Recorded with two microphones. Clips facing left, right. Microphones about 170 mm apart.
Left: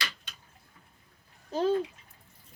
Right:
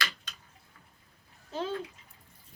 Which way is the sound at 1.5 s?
40° left (ahead or behind).